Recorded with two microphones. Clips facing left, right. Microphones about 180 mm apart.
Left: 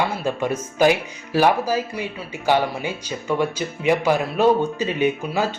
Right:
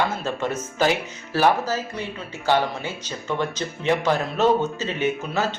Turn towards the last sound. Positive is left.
turn(degrees=15)  # may be behind; listen again after turning